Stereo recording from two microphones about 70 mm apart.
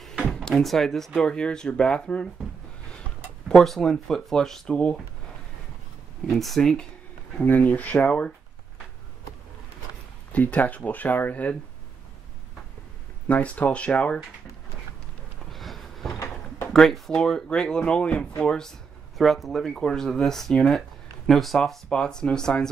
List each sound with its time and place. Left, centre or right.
0.0 s drawer open or close: centre
0.3 s speech: centre
3.4 s speech: centre
6.2 s speech: centre
7.4 s speech: left
10.3 s speech: left
13.3 s speech: left
15.5 s a sound: centre
16.7 s speech: centre